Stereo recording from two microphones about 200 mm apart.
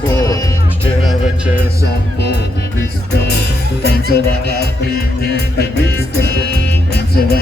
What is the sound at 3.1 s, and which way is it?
Music, 55° left (ahead or behind).